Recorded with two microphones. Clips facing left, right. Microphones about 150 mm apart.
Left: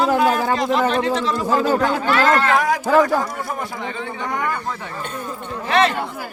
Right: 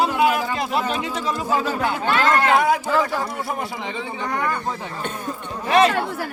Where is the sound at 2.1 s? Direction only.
20° right (ahead or behind).